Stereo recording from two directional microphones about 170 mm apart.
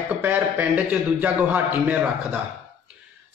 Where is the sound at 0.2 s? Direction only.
10° right (ahead or behind).